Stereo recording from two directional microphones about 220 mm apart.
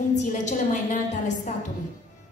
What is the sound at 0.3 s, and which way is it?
A woman's voice, 35° left (ahead or behind).